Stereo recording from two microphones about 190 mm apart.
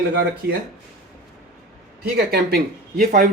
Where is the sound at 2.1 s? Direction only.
55° right (ahead or behind).